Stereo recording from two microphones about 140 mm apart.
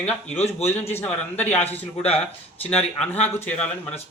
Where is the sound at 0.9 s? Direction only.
10° left (ahead or behind).